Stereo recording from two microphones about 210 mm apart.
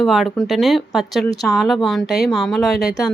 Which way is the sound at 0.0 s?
Centre (ahead or behind).